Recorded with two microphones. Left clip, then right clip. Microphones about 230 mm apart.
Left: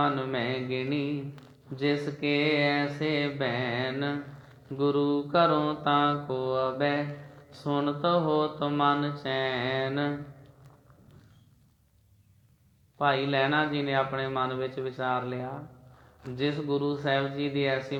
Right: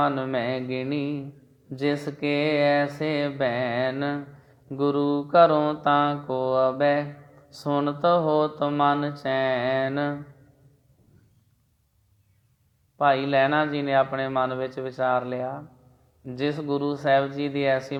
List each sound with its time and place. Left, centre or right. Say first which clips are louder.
0.0 s speech: right 4 dB; right
13.0 s speech: right 5 dB; right